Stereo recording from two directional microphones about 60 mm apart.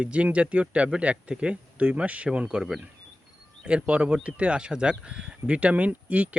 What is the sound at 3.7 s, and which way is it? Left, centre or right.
Speech, centre.